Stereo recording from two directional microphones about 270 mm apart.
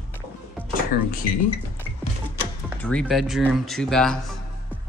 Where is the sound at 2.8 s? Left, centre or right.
Centre.